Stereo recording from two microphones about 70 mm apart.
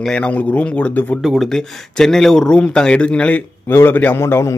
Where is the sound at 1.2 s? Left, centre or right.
Centre.